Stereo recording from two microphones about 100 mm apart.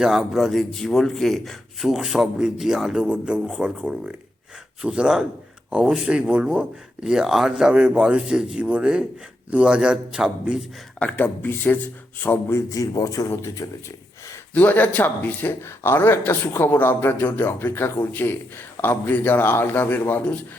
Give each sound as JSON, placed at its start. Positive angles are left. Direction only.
{"t": 0.0, "sound": "a man's voice", "side_deg": -5}
{"t": 11.0, "sound": "a man's voice", "side_deg": 15}
{"t": 14.5, "sound": "speech", "side_deg": 15}